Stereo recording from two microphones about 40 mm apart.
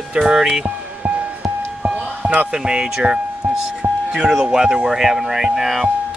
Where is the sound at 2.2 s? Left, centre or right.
Right.